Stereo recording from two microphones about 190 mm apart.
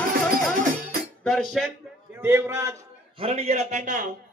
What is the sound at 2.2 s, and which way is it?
Speech, 10° right (ahead or behind).